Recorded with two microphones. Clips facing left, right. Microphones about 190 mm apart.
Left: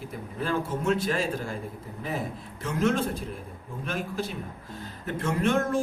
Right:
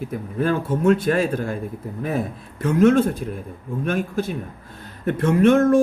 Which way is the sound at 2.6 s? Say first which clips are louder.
Right 10 dB; 55° right (ahead or behind).